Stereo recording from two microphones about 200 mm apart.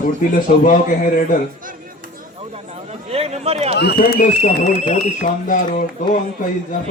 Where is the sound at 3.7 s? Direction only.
55° left (ahead or behind).